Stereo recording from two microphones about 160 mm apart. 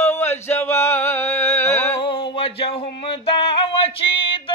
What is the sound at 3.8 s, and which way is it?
Music, 35° left (ahead or behind).